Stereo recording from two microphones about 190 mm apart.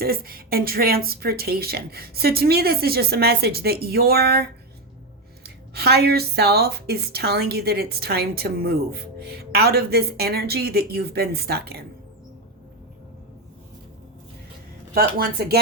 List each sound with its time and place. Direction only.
0.0 s a woman's voice: 50° right (ahead or behind)
14.9 s speech: 55° right (ahead or behind)